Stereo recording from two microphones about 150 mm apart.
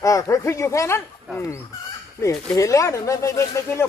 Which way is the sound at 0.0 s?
20° left (ahead or behind).